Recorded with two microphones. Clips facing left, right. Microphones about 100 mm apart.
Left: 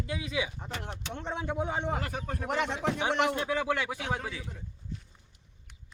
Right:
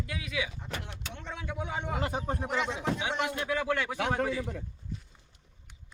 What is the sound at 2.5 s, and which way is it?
Speech, 60° left (ahead or behind).